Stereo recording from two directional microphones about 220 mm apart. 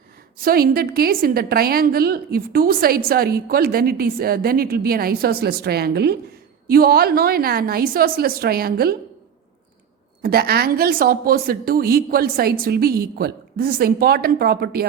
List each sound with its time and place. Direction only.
0.4 s a woman's voice: 40° right (ahead or behind)
10.2 s a woman's voice: 45° right (ahead or behind)